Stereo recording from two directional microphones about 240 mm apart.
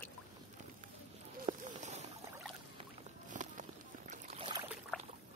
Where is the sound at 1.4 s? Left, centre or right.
Right.